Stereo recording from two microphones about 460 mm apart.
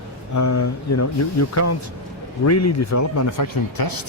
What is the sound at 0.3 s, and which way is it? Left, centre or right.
Speech, left.